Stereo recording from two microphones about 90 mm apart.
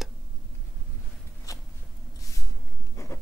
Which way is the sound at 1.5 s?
40° left (ahead or behind).